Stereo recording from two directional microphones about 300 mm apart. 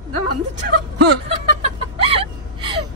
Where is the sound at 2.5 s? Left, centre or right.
Centre.